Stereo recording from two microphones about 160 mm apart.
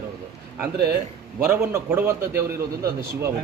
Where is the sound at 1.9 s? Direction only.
15° right (ahead or behind).